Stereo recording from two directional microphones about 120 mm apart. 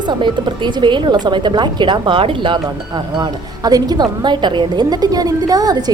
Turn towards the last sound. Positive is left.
turn(degrees=-30)  # may be behind; listen again after turning